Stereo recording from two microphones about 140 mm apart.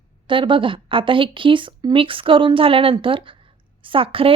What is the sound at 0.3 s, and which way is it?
A woman's voice, 35° right (ahead or behind).